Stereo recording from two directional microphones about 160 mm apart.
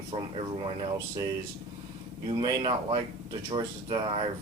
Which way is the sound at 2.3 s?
30° right (ahead or behind).